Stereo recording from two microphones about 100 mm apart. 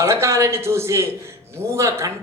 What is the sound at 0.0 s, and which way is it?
A man's voice, 30° right (ahead or behind).